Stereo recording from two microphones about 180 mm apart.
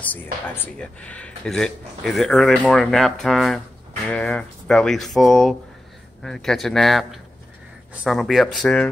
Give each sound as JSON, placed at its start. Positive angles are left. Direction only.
{"t": 0.0, "sound": "speech", "side_deg": 10}